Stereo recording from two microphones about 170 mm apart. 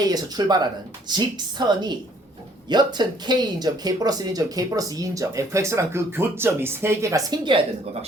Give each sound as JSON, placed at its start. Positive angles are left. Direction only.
{"t": 0.0, "sound": "speech", "side_deg": -25}